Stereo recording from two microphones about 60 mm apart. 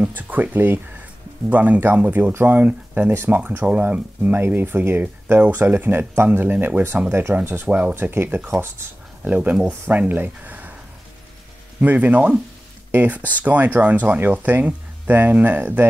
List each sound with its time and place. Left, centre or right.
0.0 s speech: right
7.1 s speech: right
7.6 s speech: right
7.9 s speech: right
11.8 s speech: right